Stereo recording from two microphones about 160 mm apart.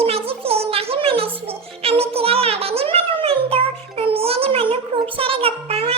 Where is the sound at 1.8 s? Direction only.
40° right (ahead or behind).